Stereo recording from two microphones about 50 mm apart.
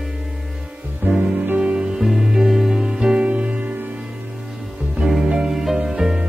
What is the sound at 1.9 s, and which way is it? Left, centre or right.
Music, centre.